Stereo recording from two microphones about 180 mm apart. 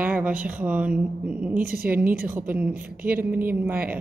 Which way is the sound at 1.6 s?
55° right (ahead or behind).